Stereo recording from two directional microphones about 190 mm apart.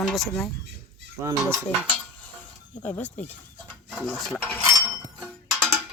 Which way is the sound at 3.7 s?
5° left (ahead or behind).